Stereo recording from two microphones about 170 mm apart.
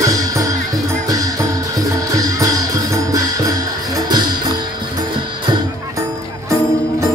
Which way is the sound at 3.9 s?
25° right (ahead or behind).